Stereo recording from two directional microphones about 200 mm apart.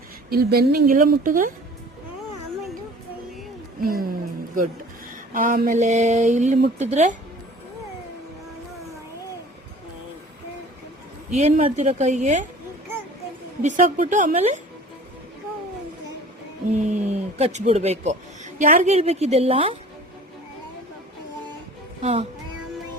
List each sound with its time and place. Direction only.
0.3 s a woman's voice: 50° right (ahead or behind)
3.8 s a sound: 45° right (ahead or behind)
5.3 s speech: 45° right (ahead or behind)
11.3 s speech: 35° right (ahead or behind)
13.6 s speech: 40° right (ahead or behind)
16.7 s speech: 35° right (ahead or behind)
22.0 s speech: 30° right (ahead or behind)